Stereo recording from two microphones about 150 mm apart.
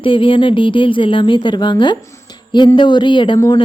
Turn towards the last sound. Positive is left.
turn(degrees=30)  # may be behind; listen again after turning